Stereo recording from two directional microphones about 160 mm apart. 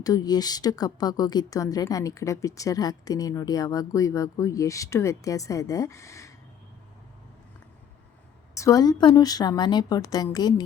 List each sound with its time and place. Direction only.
0.0 s a woman's voice: 25° left (ahead or behind)
8.5 s a woman's voice: 20° left (ahead or behind)